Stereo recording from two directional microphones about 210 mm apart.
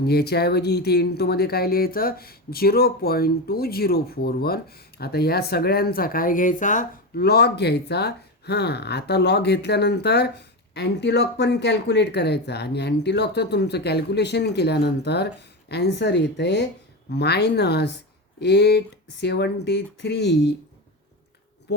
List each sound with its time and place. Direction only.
0.0 s speech: 50° left (ahead or behind)
21.7 s speech: 55° left (ahead or behind)